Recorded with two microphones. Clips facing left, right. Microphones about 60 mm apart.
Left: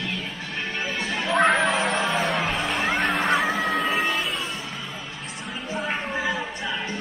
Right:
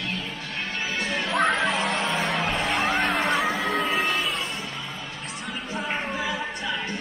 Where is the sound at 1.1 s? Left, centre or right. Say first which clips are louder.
Left 3 dB; centre.